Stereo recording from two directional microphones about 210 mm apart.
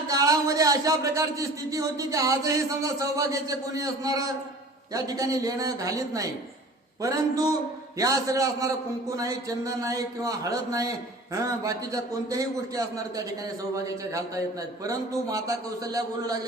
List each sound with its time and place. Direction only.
0.1 s a man's voice: 15° right (ahead or behind)